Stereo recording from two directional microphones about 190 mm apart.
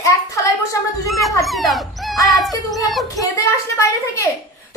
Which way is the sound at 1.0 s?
Centre (ahead or behind).